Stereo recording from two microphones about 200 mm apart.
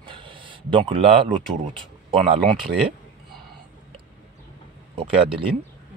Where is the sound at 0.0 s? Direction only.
25° right (ahead or behind).